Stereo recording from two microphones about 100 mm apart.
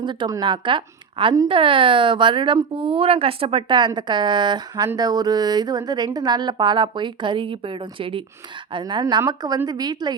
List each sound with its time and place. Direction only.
0.0 s speech: 50° right (ahead or behind)
8.7 s speech: 50° right (ahead or behind)